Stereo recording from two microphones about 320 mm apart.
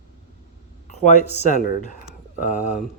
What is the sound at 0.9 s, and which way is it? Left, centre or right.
Speech, left.